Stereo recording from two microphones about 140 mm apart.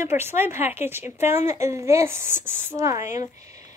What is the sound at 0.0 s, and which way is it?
A woman's voice, 15° right (ahead or behind).